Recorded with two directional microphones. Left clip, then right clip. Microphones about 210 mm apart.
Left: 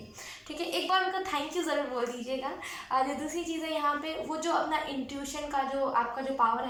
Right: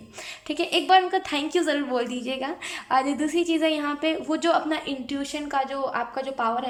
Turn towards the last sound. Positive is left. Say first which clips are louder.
# right 2 dB
turn(degrees=-50)  # may be behind; listen again after turning